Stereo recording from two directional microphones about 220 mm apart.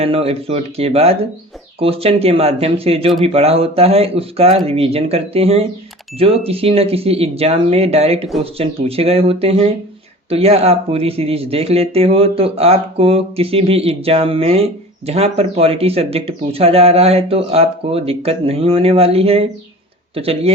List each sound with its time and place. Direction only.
0.0 s speech: 25° right (ahead or behind)